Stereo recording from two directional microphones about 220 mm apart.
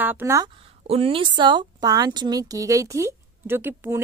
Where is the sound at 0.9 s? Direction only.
25° right (ahead or behind); by 3.9 s 10° right (ahead or behind).